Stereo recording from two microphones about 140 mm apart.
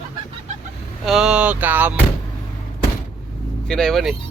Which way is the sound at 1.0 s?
5° right (ahead or behind).